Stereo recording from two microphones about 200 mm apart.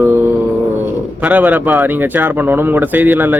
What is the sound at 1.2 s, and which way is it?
Speech, 10° right (ahead or behind).